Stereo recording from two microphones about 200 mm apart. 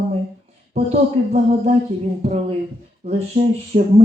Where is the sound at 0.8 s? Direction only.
30° right (ahead or behind).